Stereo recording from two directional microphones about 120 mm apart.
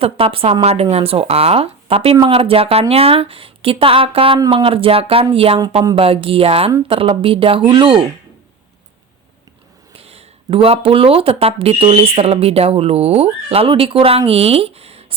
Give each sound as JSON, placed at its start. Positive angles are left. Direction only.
{"t": 0.0, "sound": "speech", "side_deg": -50}
{"t": 9.9, "sound": "speech", "side_deg": -55}